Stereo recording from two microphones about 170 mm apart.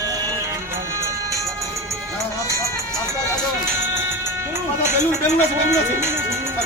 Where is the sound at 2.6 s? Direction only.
15° right (ahead or behind).